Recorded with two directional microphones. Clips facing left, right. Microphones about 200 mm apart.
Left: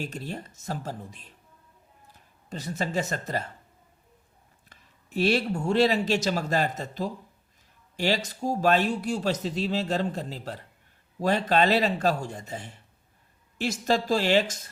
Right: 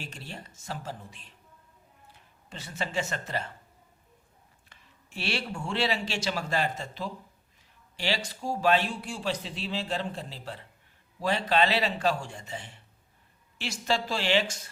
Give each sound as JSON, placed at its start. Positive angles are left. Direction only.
{"t": 0.0, "sound": "speech", "side_deg": 45}
{"t": 4.7, "sound": "speech", "side_deg": 45}